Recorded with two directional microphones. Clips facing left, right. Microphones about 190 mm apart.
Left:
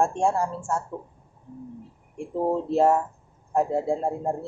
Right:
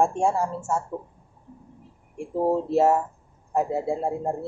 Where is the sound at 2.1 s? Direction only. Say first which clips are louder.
Right 2 dB; 5° right (ahead or behind).